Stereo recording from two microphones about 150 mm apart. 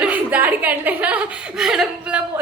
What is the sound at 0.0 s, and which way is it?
A woman's voice, 10° right (ahead or behind).